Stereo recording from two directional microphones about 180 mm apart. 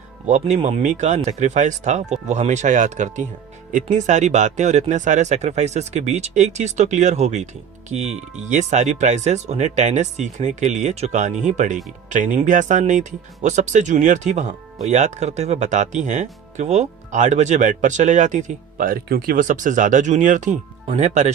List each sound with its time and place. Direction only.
0.3 s speech: 40° right (ahead or behind)